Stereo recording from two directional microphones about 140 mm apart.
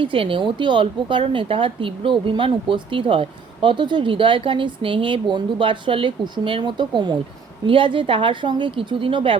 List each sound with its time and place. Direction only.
0.0 s a woman's voice: 40° right (ahead or behind)